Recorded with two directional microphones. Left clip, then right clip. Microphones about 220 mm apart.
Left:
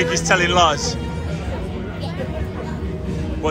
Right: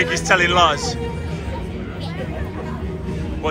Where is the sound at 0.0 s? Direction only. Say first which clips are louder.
Right 1 dB; 10° left (ahead or behind).